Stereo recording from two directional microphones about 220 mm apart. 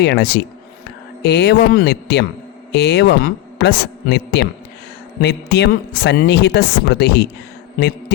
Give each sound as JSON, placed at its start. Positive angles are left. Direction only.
{"t": 0.0, "sound": "speech", "side_deg": 50}